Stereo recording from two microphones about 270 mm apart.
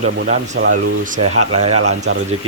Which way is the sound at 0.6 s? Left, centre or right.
Right.